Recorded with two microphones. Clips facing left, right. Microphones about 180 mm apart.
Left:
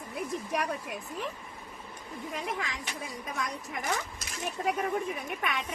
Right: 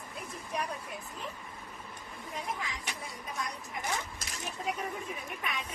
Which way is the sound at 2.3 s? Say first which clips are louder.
Left 3 dB; 90° left.